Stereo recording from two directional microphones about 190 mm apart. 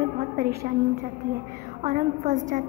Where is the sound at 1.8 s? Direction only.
40° right (ahead or behind).